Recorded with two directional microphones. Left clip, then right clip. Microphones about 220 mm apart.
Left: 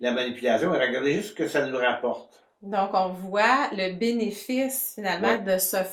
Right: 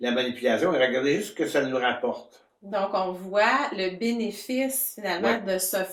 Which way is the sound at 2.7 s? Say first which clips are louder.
Left 2 dB; 35° left (ahead or behind).